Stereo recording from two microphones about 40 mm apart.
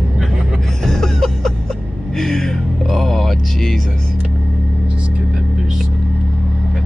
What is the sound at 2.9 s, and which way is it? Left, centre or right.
Speech, centre.